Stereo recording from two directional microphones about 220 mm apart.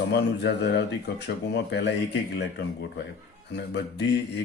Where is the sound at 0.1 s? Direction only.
50° left (ahead or behind).